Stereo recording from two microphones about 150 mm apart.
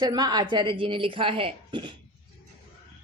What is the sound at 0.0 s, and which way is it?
A woman's voice, 25° right (ahead or behind).